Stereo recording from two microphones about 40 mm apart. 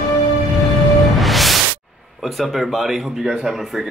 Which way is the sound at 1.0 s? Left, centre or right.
Centre.